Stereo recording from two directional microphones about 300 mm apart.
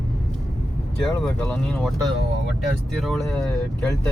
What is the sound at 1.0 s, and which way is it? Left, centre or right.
Speech, centre.